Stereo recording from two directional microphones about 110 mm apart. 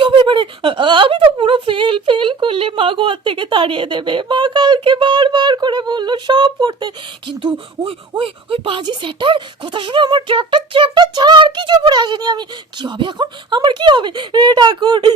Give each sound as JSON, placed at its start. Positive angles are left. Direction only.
{"t": 0.0, "sound": "speech", "side_deg": -50}